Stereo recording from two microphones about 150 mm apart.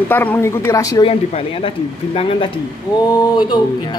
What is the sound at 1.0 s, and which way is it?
Speech, 40° left (ahead or behind).